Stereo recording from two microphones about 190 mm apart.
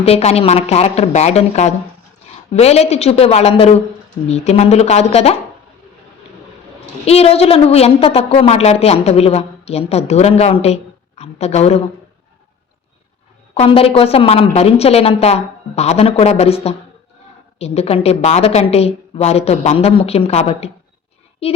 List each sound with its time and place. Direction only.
0.0 s a woman's voice: 35° left (ahead or behind)
7.0 s a woman's voice: 30° left (ahead or behind)
13.5 s a woman's voice: 30° left (ahead or behind)